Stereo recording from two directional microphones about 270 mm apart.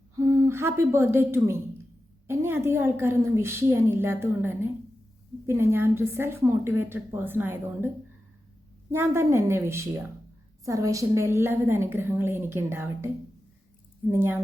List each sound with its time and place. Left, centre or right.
0.2 s a woman's voice: centre
8.9 s a woman's voice: centre
14.1 s a woman's voice: centre